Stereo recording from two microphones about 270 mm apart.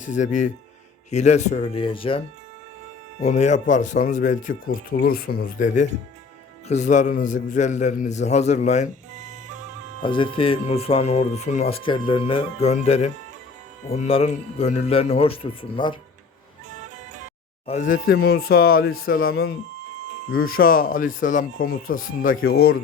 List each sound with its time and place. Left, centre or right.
0.0 s speech: left
9.1 s music: right
10.0 s speech: centre
17.7 s speech: left